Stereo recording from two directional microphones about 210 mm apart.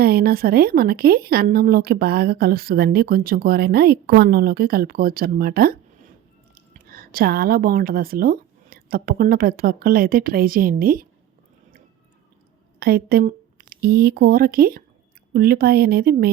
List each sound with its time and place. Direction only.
0.0 s a woman's voice: 45° right (ahead or behind)
12.8 s a woman's voice: 45° right (ahead or behind)